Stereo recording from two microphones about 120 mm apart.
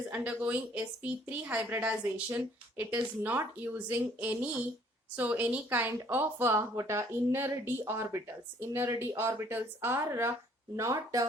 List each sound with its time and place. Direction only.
0.1 s a woman's voice: 10° right (ahead or behind); by 11.3 s 25° right (ahead or behind)